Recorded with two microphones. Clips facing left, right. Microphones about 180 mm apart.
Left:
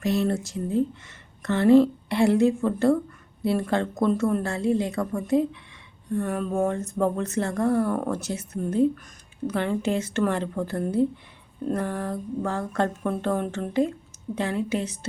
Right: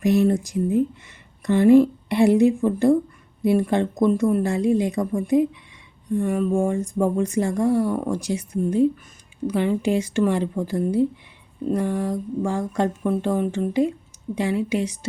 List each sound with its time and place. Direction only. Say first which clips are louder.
0.0 s speech: right 6 dB; 20° right (ahead or behind)